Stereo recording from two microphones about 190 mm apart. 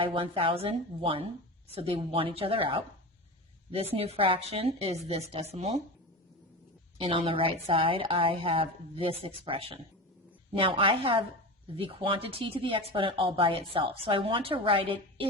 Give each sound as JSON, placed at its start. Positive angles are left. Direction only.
{"t": 0.0, "sound": "speech", "side_deg": -30}
{"t": 3.9, "sound": "speech", "side_deg": -30}
{"t": 7.0, "sound": "speech", "side_deg": -30}